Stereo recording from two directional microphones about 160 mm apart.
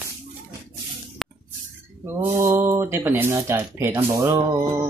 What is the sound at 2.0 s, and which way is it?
Speech, 15° right (ahead or behind).